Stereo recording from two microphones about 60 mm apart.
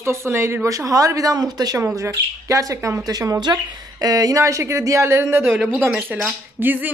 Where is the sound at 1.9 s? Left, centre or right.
Right.